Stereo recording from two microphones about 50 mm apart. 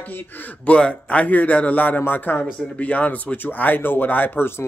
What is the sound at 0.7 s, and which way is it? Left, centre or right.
Speech, left.